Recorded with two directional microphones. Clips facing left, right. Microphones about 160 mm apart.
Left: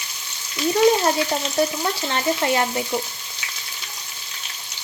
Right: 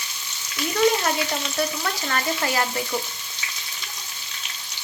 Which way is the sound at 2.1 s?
25° left (ahead or behind).